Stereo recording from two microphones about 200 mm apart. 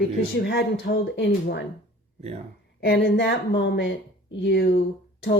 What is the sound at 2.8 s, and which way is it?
Speech, 65° left (ahead or behind).